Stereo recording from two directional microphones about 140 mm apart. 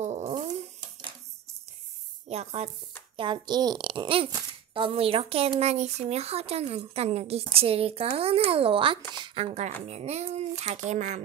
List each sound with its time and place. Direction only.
0.0 s a sound: 50° right (ahead or behind)
2.2 s a woman's voice: 50° right (ahead or behind)
3.2 s a child's voice: 30° right (ahead or behind); by 11.2 s 55° right (ahead or behind)